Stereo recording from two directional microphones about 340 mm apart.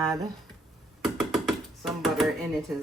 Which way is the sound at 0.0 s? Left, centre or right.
Centre.